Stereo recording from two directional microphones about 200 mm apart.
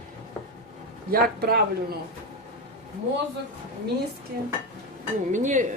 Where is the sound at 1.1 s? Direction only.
50° right (ahead or behind).